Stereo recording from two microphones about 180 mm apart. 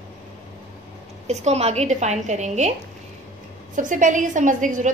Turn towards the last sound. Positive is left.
turn(degrees=-45)  # may be behind; listen again after turning